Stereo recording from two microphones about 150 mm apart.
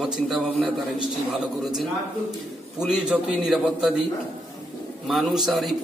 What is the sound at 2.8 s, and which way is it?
A man's voice, 5° right (ahead or behind).